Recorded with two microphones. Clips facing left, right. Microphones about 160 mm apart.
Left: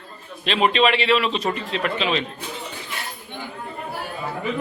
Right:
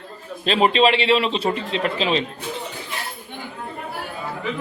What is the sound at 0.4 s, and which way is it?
A man's voice, 35° right (ahead or behind).